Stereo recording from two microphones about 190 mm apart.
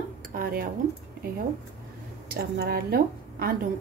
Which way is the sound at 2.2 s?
55° right (ahead or behind).